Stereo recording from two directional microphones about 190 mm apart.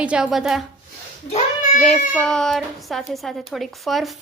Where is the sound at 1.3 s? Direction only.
40° left (ahead or behind).